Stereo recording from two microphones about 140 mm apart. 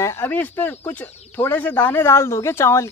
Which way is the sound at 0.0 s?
20° left (ahead or behind).